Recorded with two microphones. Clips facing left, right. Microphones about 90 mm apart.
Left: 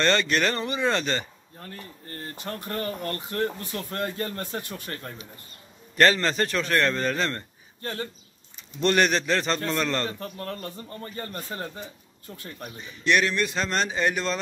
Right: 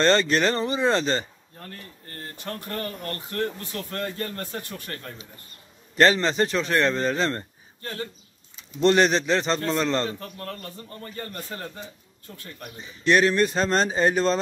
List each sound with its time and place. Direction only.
0.0 s speech: 30° right (ahead or behind)
2.3 s speech: 20° left (ahead or behind)
5.9 s speech: 20° right (ahead or behind)
7.8 s speech: 30° left (ahead or behind)
8.7 s speech: 25° right (ahead or behind)
10.1 s speech: 25° left (ahead or behind)
12.7 s speech: 25° right (ahead or behind)
13.0 s speech: 35° right (ahead or behind)